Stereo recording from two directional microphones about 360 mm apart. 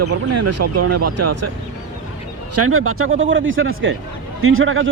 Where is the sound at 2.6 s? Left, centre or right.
Right.